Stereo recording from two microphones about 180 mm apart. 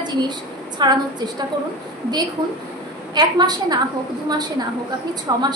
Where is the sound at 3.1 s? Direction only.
25° right (ahead or behind).